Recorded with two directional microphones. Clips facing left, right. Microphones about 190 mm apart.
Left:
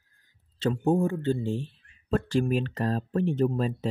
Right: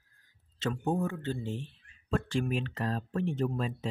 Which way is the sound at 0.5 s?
30° left (ahead or behind).